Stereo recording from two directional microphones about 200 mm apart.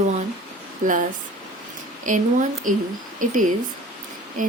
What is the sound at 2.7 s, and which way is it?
Speech, 40° right (ahead or behind).